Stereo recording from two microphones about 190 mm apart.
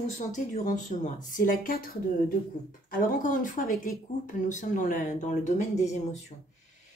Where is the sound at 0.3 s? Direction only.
40° left (ahead or behind).